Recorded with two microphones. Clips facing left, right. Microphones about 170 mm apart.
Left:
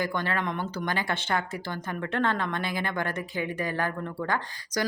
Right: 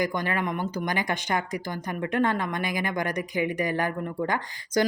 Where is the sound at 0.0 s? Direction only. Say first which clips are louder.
Right 2 dB; 15° right (ahead or behind).